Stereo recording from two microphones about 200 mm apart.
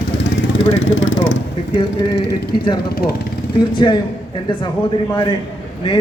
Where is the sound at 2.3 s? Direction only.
20° left (ahead or behind).